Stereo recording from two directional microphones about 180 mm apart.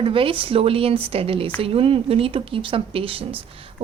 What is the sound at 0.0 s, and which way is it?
A woman's voice, 30° right (ahead or behind).